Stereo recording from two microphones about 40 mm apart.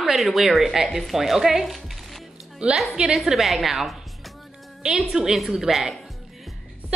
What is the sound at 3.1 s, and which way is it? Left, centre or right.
Speech, centre.